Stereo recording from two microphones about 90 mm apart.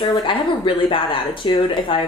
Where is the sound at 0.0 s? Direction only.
70° left (ahead or behind).